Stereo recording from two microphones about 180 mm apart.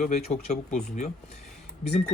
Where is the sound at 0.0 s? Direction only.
40° left (ahead or behind).